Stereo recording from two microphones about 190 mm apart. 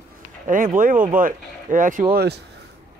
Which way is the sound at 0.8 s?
45° right (ahead or behind).